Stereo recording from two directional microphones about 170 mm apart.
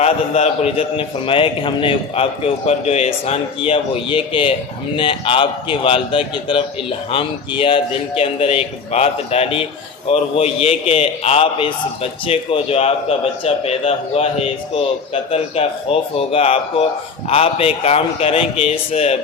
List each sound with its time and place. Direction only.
0.0 s a man's voice: 40° left (ahead or behind)